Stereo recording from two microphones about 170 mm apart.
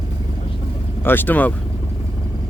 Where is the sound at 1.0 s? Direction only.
10° left (ahead or behind).